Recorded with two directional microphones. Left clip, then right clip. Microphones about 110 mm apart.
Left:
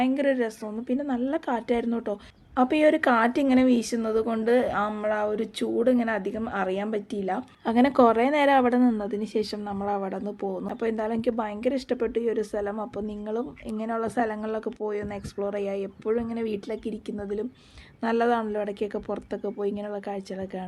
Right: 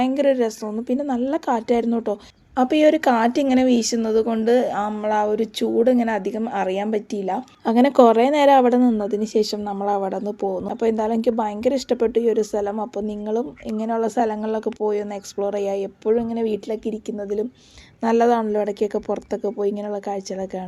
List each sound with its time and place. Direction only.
0.0 s a woman's voice: 40° right (ahead or behind)